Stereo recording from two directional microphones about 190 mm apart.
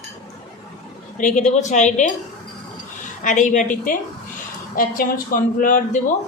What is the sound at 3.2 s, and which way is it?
Speech, 40° left (ahead or behind).